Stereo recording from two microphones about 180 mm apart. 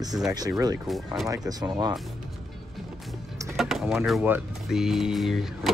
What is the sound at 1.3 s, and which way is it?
Speech, 20° right (ahead or behind).